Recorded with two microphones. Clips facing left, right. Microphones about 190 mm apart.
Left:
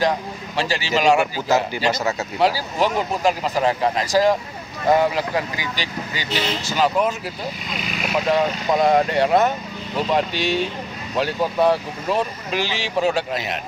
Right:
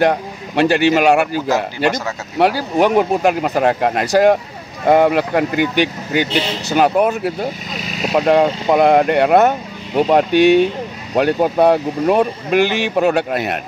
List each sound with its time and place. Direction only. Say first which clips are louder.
0.0 s speech: right 6 dB; 60° right (ahead or behind)
7.7 s speech: right 4 dB; 40° right (ahead or behind)
8.6 s speech: right 4 dB; 60° right (ahead or behind)